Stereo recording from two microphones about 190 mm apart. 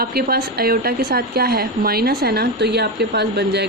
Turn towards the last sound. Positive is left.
turn(degrees=-60)  # may be behind; listen again after turning